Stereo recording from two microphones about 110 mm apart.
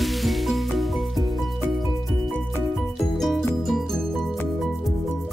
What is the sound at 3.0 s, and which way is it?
Music, centre (ahead or behind).